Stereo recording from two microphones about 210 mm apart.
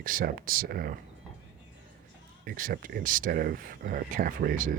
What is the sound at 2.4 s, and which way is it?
Speech, 45° right (ahead or behind).